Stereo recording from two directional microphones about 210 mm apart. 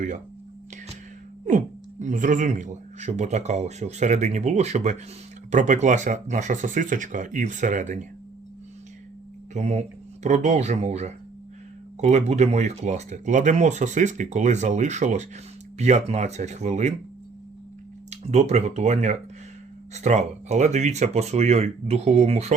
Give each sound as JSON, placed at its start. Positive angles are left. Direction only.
{"t": 1.5, "sound": "speech", "side_deg": -35}
{"t": 9.6, "sound": "speech", "side_deg": -35}
{"t": 18.1, "sound": "speech", "side_deg": -30}